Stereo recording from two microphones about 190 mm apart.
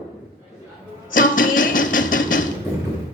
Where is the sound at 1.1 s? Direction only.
45° left (ahead or behind).